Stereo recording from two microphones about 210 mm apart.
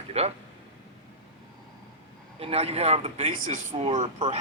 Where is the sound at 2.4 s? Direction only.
30° right (ahead or behind).